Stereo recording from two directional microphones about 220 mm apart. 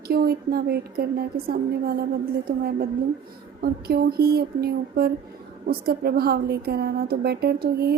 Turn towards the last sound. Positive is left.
turn(degrees=-45)  # may be behind; listen again after turning